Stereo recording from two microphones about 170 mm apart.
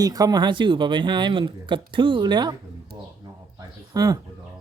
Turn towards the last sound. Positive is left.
turn(degrees=-20)  # may be behind; listen again after turning